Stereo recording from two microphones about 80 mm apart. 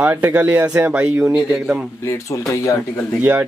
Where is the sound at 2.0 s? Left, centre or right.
Left.